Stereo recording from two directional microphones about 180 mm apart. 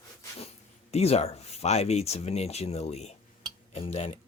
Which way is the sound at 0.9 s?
35° left (ahead or behind).